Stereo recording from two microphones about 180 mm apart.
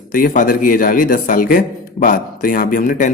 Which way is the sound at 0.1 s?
50° left (ahead or behind).